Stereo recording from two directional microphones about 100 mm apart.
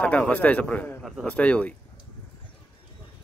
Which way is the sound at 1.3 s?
15° left (ahead or behind).